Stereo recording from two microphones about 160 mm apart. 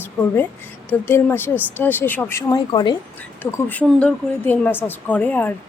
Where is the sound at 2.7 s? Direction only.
25° left (ahead or behind).